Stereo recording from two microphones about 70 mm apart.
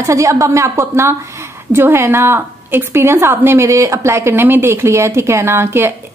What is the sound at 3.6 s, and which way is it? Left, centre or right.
Speech, right.